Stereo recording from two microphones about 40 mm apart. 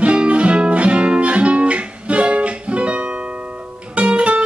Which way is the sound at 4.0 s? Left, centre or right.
Right.